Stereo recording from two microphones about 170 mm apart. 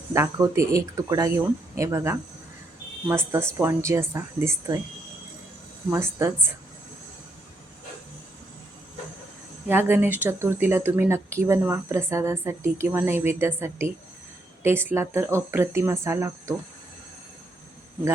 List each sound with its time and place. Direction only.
0.1 s speech: 15° right (ahead or behind)
5.9 s speech: 15° right (ahead or behind)
9.6 s speech: 10° right (ahead or behind)